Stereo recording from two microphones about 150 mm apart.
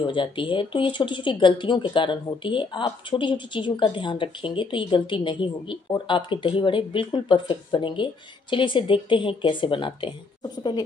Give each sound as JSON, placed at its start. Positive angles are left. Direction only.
{"t": 0.0, "sound": "speech", "side_deg": 35}